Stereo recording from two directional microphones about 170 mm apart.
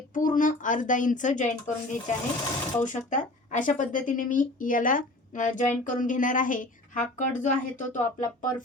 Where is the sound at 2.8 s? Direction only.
45° left (ahead or behind).